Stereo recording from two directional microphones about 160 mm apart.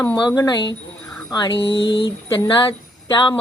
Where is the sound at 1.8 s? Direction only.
90° left.